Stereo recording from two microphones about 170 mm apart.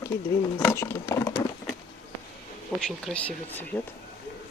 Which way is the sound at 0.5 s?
15° left (ahead or behind).